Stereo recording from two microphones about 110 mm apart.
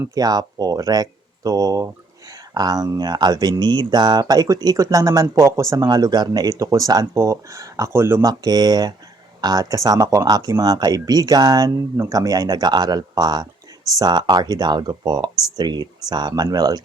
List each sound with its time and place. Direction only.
0.1 s speech: 35° right (ahead or behind)
8.2 s speech: 35° right (ahead or behind)